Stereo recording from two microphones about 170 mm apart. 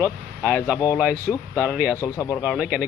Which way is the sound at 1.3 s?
Centre (ahead or behind).